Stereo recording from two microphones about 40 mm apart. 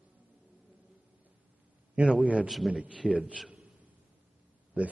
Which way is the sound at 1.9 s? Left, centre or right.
Right.